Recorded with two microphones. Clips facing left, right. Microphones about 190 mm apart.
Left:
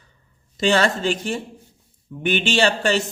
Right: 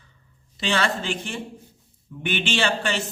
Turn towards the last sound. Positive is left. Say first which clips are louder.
# left 5 dB
turn(degrees=40)  # may be behind; listen again after turning